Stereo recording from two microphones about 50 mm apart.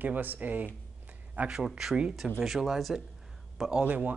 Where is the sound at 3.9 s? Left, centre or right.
Right.